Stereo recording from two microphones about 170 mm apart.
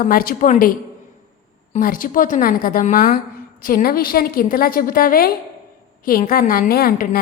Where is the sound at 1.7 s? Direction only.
55° left (ahead or behind).